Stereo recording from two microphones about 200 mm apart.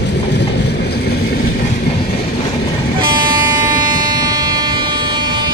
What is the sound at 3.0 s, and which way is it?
Vehicle, 25° right (ahead or behind).